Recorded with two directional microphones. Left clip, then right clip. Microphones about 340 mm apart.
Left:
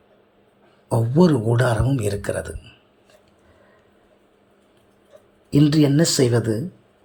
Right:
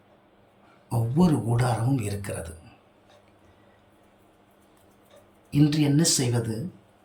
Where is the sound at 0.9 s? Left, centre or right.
Centre.